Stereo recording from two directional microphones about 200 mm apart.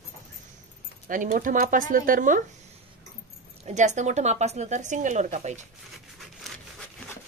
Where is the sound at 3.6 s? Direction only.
35° right (ahead or behind).